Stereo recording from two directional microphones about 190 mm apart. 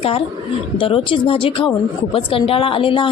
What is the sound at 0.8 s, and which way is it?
Speech, 30° left (ahead or behind).